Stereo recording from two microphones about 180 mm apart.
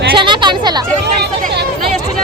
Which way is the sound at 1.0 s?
70° right (ahead or behind).